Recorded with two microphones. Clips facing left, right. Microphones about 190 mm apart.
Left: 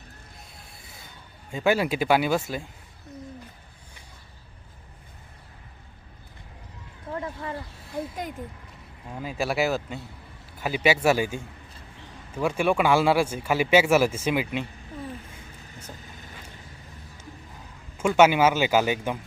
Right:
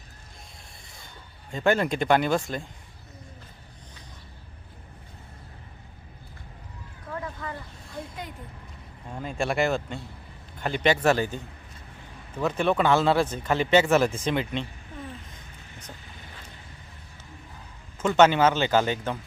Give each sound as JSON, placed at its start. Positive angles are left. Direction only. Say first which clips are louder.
{"t": 1.5, "sound": "speech", "louder": "even", "side_deg": 5}
{"t": 7.1, "sound": "a sound", "louder": "left 2 dB", "side_deg": 30}
{"t": 9.0, "sound": "speech", "louder": "even", "side_deg": 5}
{"t": 18.0, "sound": "speech", "louder": "even", "side_deg": 10}